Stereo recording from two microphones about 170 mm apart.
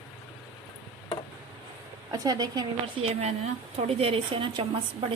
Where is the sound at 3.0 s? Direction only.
40° right (ahead or behind).